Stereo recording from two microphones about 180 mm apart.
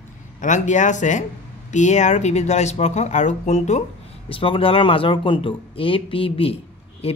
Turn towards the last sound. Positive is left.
turn(degrees=35)  # may be behind; listen again after turning